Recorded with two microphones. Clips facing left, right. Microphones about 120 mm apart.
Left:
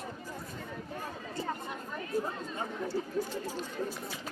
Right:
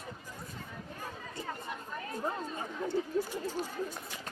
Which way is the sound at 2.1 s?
5° left (ahead or behind).